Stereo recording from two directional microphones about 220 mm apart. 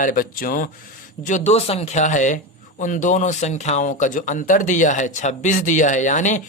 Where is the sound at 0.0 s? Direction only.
40° left (ahead or behind).